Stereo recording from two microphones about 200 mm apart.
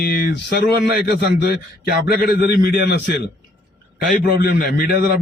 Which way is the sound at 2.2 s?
50° left (ahead or behind).